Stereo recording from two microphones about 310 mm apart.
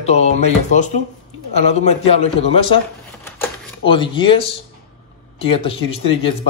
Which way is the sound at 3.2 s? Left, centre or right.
Centre.